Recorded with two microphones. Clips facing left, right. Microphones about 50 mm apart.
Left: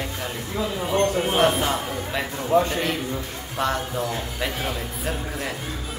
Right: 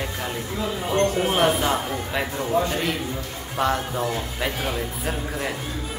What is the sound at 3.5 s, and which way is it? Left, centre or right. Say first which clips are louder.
Speech: right 2 dB; centre.